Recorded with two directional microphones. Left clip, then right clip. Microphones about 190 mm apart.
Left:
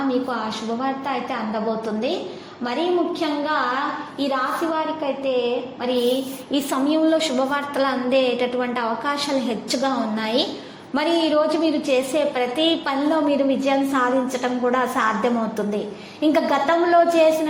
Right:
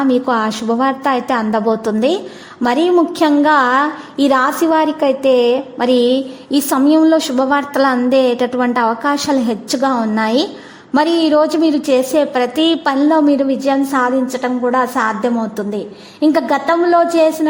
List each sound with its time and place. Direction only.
0.1 s a woman's voice: 55° right (ahead or behind); by 17.5 s 35° right (ahead or behind)